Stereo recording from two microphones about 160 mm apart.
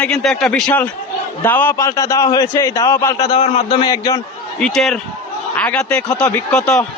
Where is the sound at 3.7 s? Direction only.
25° left (ahead or behind).